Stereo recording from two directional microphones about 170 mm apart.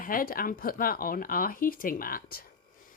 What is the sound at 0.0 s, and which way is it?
Speech, 55° left (ahead or behind).